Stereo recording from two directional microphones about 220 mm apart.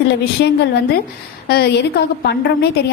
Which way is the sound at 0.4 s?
50° left (ahead or behind).